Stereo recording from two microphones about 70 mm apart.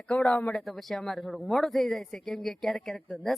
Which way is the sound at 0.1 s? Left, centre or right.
Centre.